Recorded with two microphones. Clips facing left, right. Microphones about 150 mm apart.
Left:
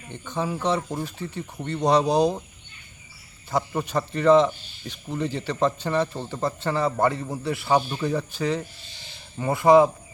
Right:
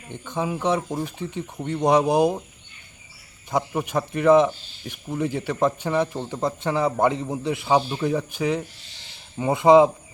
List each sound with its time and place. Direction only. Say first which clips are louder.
0.1 s speech: right 1 dB; 15° right (ahead or behind)
3.5 s speech: right 1 dB; 10° right (ahead or behind)